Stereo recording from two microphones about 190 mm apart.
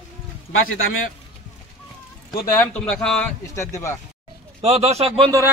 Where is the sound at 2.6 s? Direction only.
5° left (ahead or behind).